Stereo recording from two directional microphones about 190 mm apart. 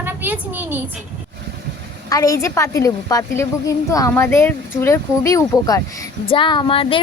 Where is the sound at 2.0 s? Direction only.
20° left (ahead or behind).